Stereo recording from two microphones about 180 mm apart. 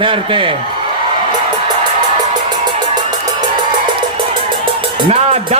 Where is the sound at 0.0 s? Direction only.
30° right (ahead or behind).